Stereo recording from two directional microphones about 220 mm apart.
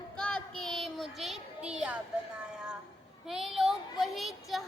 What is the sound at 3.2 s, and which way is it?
A woman's voice, centre (ahead or behind).